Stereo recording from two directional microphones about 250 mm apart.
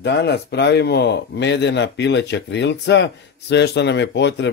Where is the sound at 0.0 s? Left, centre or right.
Left.